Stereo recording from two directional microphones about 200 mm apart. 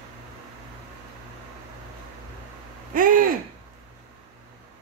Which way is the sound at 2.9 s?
45° right (ahead or behind).